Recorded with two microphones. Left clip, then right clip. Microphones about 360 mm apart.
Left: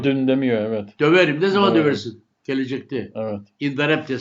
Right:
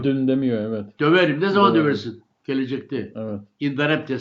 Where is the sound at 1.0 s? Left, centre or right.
Centre.